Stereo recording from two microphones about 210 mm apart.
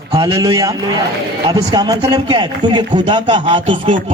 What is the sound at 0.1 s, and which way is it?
A man's voice, 15° right (ahead or behind).